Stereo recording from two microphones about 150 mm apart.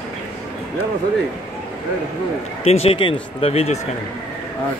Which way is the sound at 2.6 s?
40° left (ahead or behind).